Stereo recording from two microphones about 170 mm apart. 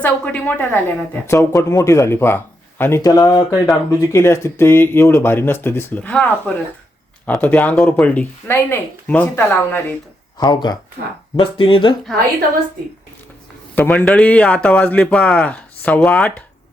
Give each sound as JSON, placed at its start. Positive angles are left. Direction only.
{"t": 0.0, "sound": "a woman's voice", "side_deg": 10}
{"t": 10.3, "sound": "speech", "side_deg": 25}
{"t": 13.7, "sound": "a woman's voice", "side_deg": 10}